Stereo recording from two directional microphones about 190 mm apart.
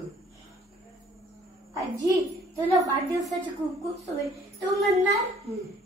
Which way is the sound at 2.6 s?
Centre (ahead or behind).